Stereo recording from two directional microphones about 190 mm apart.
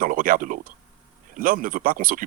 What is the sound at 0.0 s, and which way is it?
Speech, 45° right (ahead or behind).